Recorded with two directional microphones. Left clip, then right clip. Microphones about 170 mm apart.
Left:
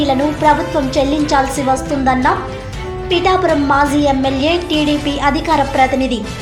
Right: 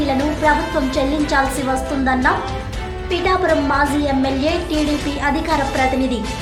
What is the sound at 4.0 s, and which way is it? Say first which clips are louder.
A woman's voice: left 4 dB; 15° left (ahead or behind).